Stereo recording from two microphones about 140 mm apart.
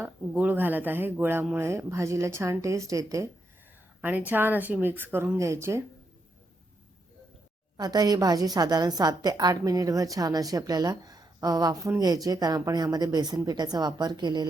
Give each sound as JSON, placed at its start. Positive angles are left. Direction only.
{"t": 0.0, "sound": "a woman's voice", "side_deg": -10}
{"t": 4.3, "sound": "speech", "side_deg": -15}
{"t": 7.8, "sound": "a woman's voice", "side_deg": -30}